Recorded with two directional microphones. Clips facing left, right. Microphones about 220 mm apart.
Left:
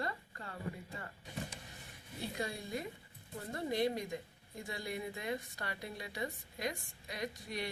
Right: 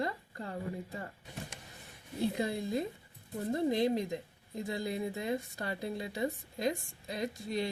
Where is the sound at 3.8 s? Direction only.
25° right (ahead or behind).